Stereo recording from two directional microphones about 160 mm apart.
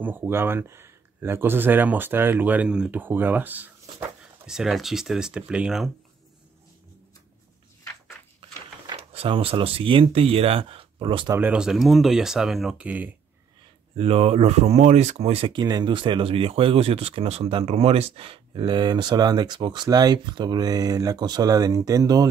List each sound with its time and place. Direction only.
0.0 s speech: 15° right (ahead or behind)
8.4 s speech: 35° right (ahead or behind)
11.3 s speech: 10° right (ahead or behind)
13.9 s speech: 40° right (ahead or behind); by 22.3 s 25° right (ahead or behind)